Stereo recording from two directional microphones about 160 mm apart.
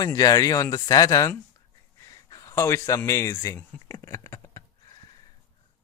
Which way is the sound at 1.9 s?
20° left (ahead or behind).